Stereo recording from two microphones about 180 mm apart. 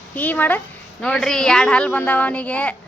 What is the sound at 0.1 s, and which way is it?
A woman's voice, 10° left (ahead or behind).